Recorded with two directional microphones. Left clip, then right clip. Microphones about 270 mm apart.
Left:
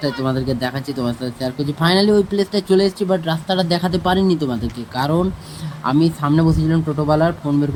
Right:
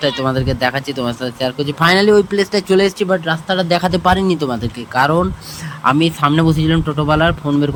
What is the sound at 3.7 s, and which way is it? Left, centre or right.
Speech, centre.